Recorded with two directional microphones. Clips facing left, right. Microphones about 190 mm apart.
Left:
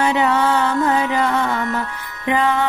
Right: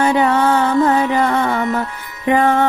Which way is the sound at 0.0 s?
45° right (ahead or behind).